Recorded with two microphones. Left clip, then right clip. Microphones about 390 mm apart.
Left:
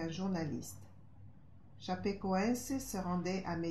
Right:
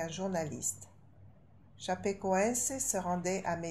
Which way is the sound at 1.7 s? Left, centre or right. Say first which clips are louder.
Right 4 dB; right.